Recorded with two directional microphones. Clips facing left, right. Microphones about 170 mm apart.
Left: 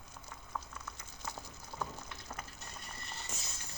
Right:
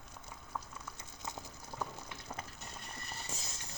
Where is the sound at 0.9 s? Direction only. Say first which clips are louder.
Right 1 dB; 20° right (ahead or behind).